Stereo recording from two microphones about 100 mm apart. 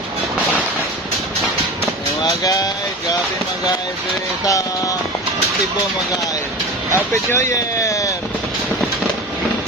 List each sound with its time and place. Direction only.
2.2 s vehicle: 40° left (ahead or behind)
6.9 s speech: 25° left (ahead or behind)